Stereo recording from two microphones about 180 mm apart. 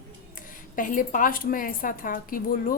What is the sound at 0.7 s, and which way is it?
A woman's voice, 50° left (ahead or behind).